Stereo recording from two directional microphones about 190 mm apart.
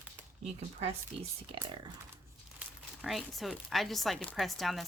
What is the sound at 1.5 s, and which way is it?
Speech, 30° right (ahead or behind).